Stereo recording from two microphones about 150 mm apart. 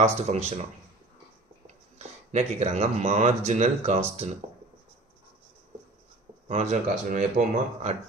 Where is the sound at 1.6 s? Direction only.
45° right (ahead or behind).